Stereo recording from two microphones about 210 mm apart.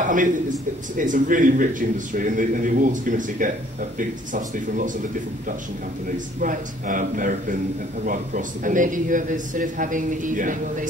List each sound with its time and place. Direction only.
0.0 s a man's voice: 40° right (ahead or behind)
6.1 s a man's voice: 40° right (ahead or behind)